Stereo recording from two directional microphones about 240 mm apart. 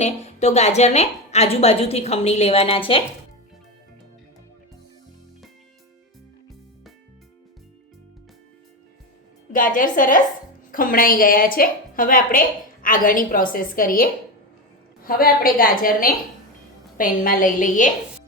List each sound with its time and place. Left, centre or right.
0.0 s a woman's voice: left
9.5 s a woman's voice: left